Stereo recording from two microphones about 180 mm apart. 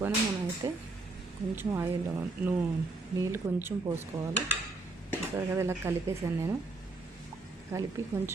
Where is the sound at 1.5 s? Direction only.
10° right (ahead or behind).